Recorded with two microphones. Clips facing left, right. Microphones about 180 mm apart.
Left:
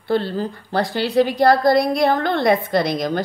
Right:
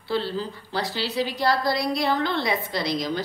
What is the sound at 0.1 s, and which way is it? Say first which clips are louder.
A woman's voice: left 6 dB; 50° left (ahead or behind).